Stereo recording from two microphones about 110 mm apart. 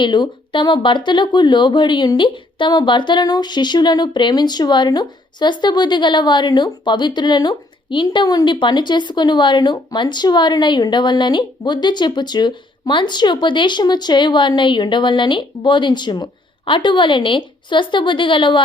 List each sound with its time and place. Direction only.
0.0 s a woman's voice: 45° left (ahead or behind)